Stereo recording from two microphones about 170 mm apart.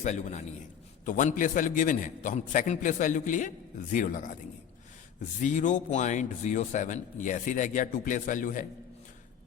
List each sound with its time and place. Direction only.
0.0 s speech: 45° left (ahead or behind)
5.4 s speech: 45° left (ahead or behind)